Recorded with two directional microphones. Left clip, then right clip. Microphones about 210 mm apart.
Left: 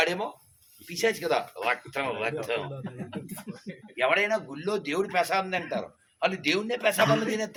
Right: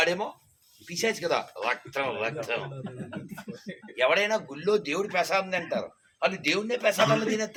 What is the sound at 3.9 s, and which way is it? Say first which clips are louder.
Speech: right 1 dB; 40° right (ahead or behind).